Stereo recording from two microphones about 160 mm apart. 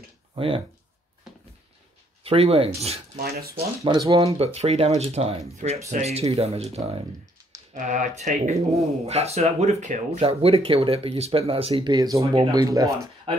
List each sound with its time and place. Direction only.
2.2 s speech: 40° right (ahead or behind)
3.2 s speech: 70° right (ahead or behind)
3.8 s speech: 25° right (ahead or behind)
4.2 s speech: 40° right (ahead or behind)
11.9 s speech: 20° right (ahead or behind)